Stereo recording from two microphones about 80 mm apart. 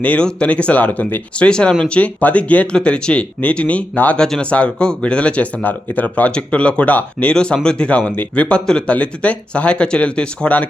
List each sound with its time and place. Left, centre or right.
0.0 s speech: centre